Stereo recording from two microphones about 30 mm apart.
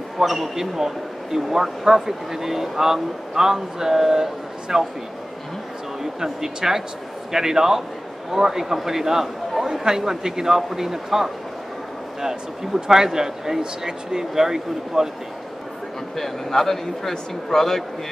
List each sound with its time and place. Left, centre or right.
0.2 s speech: centre
6.2 s speech: centre
16.2 s speech: centre